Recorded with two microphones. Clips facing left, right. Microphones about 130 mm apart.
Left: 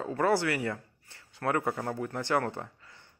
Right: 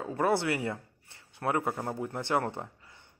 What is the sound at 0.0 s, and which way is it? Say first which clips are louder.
Speech: left 1 dB; 10° right (ahead or behind).